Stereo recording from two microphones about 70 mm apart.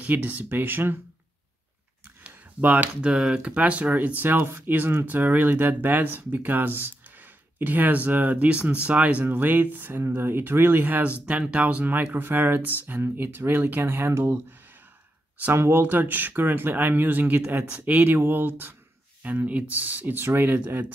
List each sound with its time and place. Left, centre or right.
0.0 s speech: right
2.2 s speech: right
15.5 s speech: right